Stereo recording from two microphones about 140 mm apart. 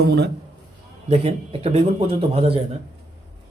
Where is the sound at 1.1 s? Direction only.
45° right (ahead or behind).